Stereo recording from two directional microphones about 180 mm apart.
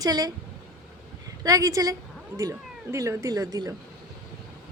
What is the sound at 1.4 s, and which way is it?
Speech, 20° right (ahead or behind).